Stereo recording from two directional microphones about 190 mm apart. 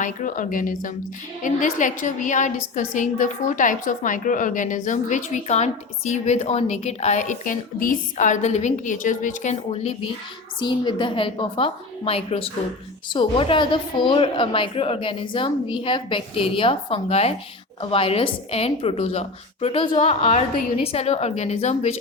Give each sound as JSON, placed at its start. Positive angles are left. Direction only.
{"t": 0.0, "sound": "a woman's voice", "side_deg": 45}